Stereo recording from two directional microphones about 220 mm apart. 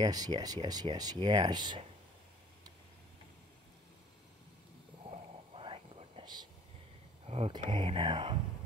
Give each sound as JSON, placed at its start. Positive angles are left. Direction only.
{"t": 0.0, "sound": "speech", "side_deg": -20}
{"t": 5.1, "sound": "whispering", "side_deg": -25}
{"t": 7.2, "sound": "speech", "side_deg": -25}